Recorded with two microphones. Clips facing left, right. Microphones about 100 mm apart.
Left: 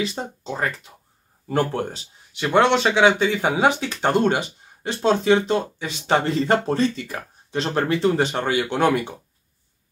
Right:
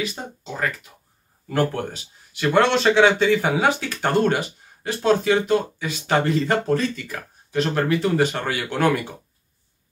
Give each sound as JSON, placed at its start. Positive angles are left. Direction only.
{"t": 0.0, "sound": "speech", "side_deg": 30}